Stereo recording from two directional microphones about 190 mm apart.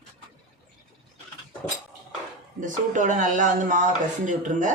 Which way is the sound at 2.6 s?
40° right (ahead or behind).